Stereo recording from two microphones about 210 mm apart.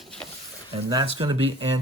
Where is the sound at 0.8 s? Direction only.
20° right (ahead or behind).